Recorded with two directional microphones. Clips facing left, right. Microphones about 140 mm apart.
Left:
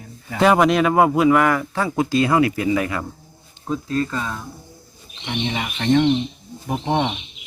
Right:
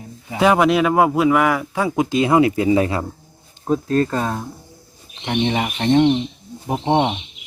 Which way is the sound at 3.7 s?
45° right (ahead or behind).